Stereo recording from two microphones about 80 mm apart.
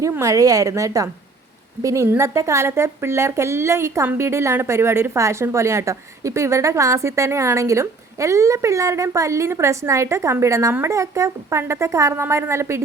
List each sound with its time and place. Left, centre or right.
0.2 s a woman's voice: right